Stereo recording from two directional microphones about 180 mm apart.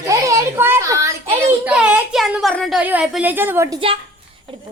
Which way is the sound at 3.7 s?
30° right (ahead or behind).